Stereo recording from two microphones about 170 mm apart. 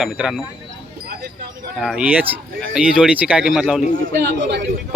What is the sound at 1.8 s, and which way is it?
Speech, 5° right (ahead or behind).